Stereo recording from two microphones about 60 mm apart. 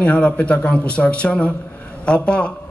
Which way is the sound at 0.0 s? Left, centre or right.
Left.